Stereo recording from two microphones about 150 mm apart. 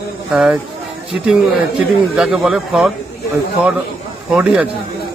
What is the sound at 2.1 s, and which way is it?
Speech, 5° right (ahead or behind).